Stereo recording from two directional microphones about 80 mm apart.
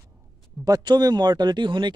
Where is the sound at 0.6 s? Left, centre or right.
Right.